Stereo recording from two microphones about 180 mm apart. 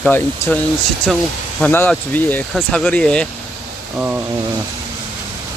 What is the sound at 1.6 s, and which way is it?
Speech, 10° left (ahead or behind).